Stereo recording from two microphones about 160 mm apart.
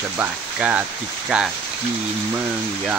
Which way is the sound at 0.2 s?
10° right (ahead or behind).